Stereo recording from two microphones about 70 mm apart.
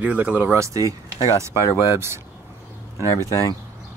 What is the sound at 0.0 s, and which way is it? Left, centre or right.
Speech, right.